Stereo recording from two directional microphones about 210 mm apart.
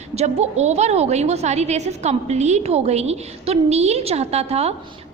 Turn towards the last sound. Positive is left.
turn(degrees=-30)  # may be behind; listen again after turning